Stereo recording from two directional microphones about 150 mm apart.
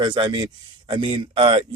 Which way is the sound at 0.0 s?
30° right (ahead or behind).